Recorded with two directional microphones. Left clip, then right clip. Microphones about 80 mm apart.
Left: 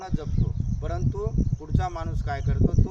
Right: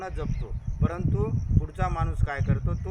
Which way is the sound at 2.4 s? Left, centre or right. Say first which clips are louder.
Left 5 dB; left.